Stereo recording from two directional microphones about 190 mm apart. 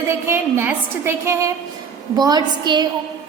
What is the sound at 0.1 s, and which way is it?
A woman's voice, 15° right (ahead or behind).